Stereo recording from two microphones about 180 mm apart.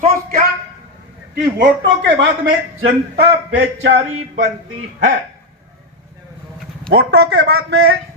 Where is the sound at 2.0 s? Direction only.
75° right (ahead or behind).